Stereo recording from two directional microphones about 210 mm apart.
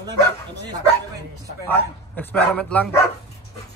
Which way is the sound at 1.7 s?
5° left (ahead or behind).